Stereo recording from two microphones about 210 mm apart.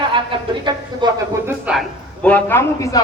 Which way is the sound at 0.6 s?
20° right (ahead or behind).